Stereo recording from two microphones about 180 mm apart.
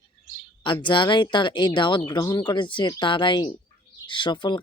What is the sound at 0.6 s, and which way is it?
Speech, 25° left (ahead or behind).